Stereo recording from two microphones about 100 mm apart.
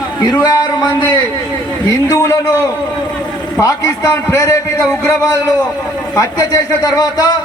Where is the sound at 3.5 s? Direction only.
35° left (ahead or behind).